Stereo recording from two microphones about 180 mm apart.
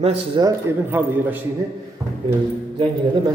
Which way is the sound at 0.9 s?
10° right (ahead or behind).